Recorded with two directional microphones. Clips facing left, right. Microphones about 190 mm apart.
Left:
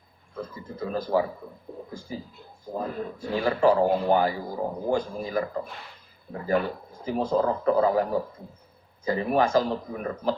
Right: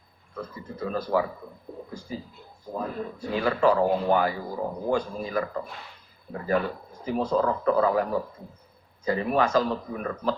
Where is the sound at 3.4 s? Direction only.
25° left (ahead or behind).